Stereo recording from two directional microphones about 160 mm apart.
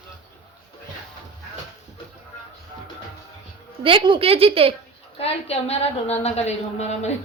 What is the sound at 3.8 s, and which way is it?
Speech, 35° right (ahead or behind).